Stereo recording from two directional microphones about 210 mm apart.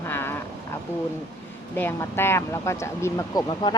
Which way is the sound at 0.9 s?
10° left (ahead or behind).